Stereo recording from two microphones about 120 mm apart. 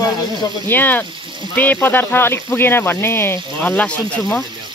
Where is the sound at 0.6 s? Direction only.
15° left (ahead or behind).